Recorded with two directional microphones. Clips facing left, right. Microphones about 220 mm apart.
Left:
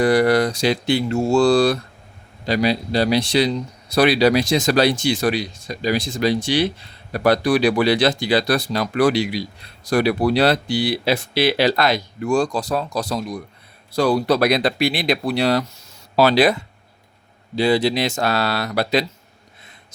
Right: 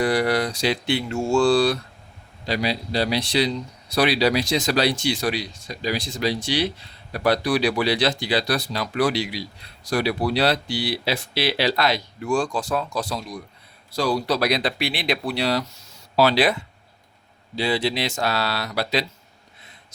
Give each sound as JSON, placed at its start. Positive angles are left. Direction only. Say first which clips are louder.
{"t": 0.0, "sound": "speech", "louder": "left 5 dB", "side_deg": 45}